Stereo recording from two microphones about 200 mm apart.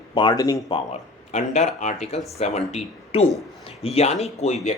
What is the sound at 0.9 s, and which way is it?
A man's voice, 35° left (ahead or behind).